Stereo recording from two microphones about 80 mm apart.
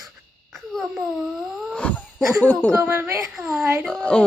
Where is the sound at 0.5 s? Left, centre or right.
Centre.